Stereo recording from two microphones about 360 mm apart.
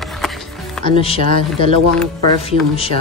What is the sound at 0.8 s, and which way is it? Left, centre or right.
Speech, centre.